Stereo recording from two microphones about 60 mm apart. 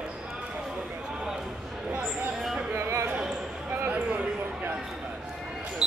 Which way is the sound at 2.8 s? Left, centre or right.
Right.